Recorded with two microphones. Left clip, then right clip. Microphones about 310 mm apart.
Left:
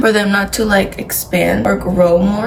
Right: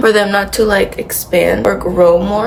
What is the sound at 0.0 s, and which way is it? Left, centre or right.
Speech, centre.